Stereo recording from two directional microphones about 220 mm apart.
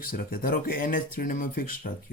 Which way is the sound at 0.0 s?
40° left (ahead or behind).